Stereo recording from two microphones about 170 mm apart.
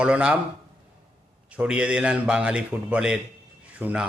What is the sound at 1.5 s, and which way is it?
A man's voice, 5° right (ahead or behind).